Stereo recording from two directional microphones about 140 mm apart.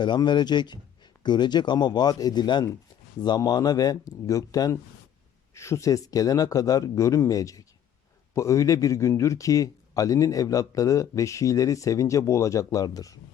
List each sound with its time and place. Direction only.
0.0 s speech: 30° left (ahead or behind)